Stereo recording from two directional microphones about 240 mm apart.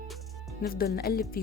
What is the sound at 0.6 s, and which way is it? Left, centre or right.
Speech, left.